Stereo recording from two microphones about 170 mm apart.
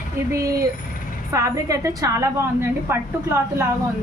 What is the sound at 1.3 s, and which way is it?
A woman's voice, 20° right (ahead or behind).